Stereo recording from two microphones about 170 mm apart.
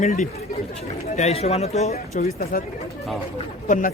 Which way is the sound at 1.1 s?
40° left (ahead or behind).